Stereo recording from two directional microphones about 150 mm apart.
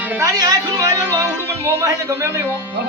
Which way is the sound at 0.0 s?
15° right (ahead or behind).